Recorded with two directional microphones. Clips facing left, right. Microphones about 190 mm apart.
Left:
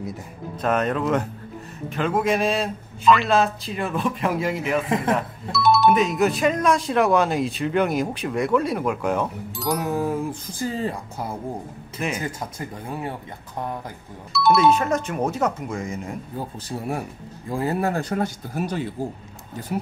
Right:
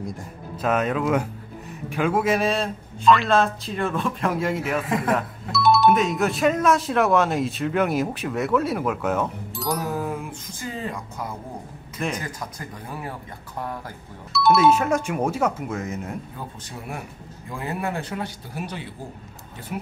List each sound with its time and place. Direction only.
0.0 s speech: centre (ahead or behind)
4.8 s speech: 25° left (ahead or behind)
5.1 s speech: centre (ahead or behind)
9.8 s speech: 20° left (ahead or behind)
10.6 s speech: 35° left (ahead or behind)
14.3 s speech: centre (ahead or behind)
16.3 s speech: 35° left (ahead or behind)